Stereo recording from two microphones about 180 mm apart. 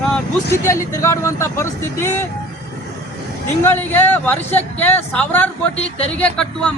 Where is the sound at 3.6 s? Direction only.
10° left (ahead or behind).